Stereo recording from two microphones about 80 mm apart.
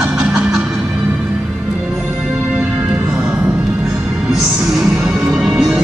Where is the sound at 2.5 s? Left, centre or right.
Right.